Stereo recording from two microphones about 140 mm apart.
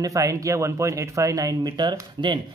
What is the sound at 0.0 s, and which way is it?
Speech, 25° right (ahead or behind).